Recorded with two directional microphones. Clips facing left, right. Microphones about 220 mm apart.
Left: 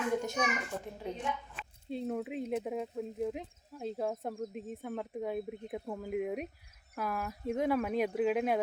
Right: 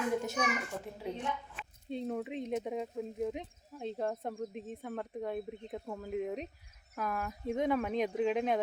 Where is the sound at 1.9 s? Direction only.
5° left (ahead or behind).